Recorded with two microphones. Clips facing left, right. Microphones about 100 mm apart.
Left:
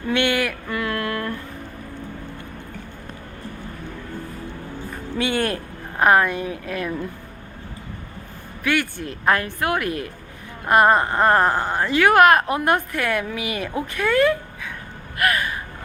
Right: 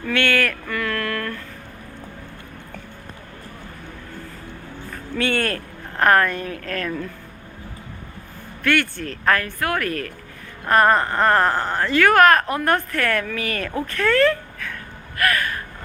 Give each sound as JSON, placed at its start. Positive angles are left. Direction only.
{"t": 0.0, "sound": "a sound", "side_deg": 15}
{"t": 5.1, "sound": "speech", "side_deg": 15}
{"t": 8.6, "sound": "speech", "side_deg": 10}
{"t": 15.2, "sound": "gasp", "side_deg": 20}